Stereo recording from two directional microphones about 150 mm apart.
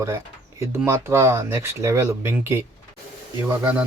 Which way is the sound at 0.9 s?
15° right (ahead or behind).